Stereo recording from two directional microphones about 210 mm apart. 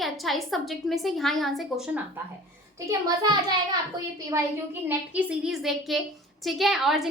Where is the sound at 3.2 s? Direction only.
20° right (ahead or behind).